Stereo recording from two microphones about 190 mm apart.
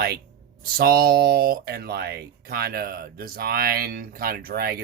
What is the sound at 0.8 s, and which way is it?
Speech, 55° right (ahead or behind).